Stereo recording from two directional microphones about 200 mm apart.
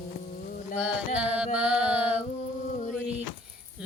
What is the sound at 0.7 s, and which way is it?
Mantra, 5° right (ahead or behind).